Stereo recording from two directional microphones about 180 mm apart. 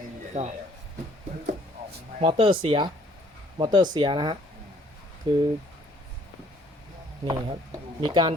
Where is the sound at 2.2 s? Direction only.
30° right (ahead or behind).